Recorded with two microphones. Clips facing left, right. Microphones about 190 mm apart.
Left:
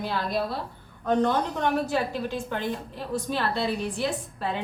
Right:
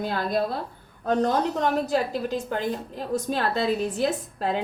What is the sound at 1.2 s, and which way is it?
A woman's voice, 40° right (ahead or behind).